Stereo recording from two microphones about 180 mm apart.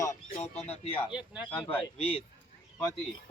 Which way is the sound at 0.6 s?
35° left (ahead or behind).